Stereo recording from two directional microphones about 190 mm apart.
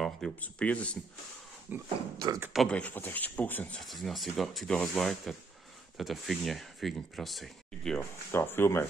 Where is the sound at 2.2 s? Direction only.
20° right (ahead or behind).